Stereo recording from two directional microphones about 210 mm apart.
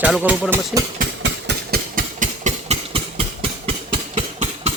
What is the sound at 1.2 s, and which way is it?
Engine, 50° right (ahead or behind).